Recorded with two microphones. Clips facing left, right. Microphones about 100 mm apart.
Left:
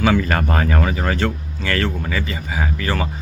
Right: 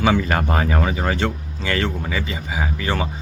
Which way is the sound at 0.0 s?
15° right (ahead or behind).